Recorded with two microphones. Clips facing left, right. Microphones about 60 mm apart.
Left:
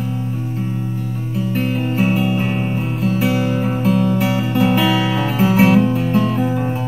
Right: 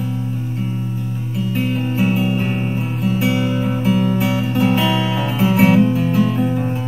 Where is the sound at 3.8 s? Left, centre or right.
Left.